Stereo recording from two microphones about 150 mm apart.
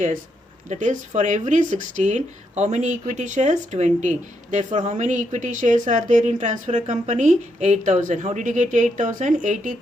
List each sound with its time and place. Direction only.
0.7 s a woman's voice: 55° right (ahead or behind)